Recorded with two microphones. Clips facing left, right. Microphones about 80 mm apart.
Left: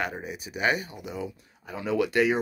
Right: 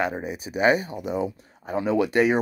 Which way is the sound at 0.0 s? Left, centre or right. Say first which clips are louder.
Right 5 dB; right.